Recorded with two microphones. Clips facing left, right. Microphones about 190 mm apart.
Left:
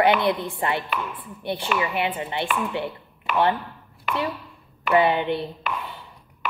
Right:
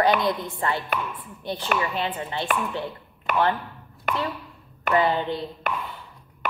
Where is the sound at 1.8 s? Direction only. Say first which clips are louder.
Left 2 dB; 15° left (ahead or behind).